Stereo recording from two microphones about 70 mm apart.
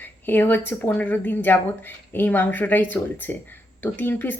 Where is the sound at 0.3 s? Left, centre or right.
Left.